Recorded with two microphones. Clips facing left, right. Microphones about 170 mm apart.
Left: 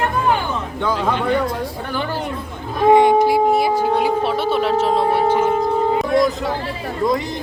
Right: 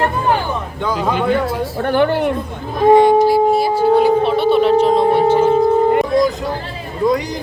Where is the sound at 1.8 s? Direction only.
60° right (ahead or behind).